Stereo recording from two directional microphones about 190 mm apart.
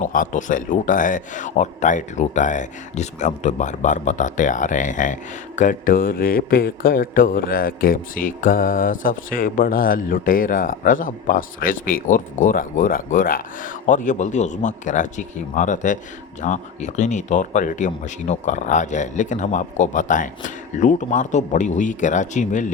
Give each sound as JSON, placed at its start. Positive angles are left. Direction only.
{"t": 0.0, "sound": "a man's voice", "side_deg": 45}